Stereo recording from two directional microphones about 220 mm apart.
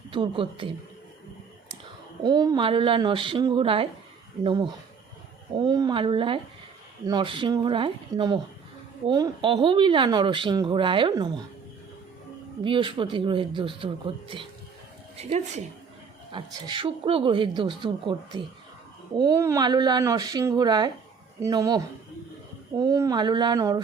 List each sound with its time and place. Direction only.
0.1 s speech: 20° right (ahead or behind)
2.2 s speech: 20° right (ahead or behind)
12.6 s speech: 20° right (ahead or behind)
22.8 s speech: 15° right (ahead or behind)